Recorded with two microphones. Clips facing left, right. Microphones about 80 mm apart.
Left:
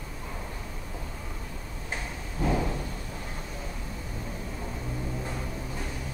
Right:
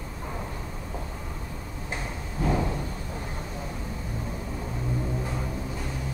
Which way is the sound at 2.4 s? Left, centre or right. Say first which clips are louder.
Right 1 dB; centre.